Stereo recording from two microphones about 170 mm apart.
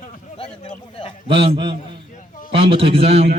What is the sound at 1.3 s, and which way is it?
A man's voice, 30° right (ahead or behind).